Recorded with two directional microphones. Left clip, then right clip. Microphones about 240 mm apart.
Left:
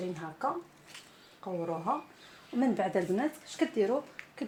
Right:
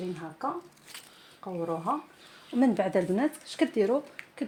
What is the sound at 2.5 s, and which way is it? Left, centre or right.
Speech, right.